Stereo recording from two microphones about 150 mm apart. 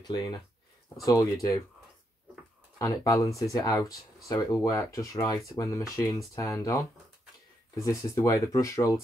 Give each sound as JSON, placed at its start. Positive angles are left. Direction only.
{"t": 0.0, "sound": "speech", "side_deg": 25}
{"t": 2.8, "sound": "speech", "side_deg": 20}